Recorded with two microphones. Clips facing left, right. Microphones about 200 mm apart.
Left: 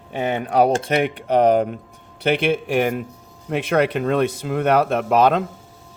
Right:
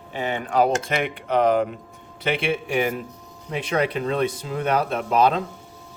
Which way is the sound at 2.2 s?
55° left (ahead or behind).